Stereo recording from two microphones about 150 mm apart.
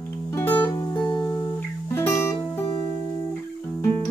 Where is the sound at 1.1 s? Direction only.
25° left (ahead or behind).